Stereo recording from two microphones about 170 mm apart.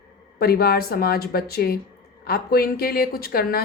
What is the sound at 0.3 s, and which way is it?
A woman's voice, 65° left (ahead or behind).